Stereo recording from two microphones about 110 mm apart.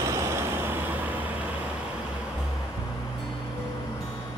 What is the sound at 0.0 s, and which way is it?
Vehicle, 25° right (ahead or behind).